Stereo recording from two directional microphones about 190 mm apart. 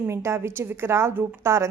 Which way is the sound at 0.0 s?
15° right (ahead or behind).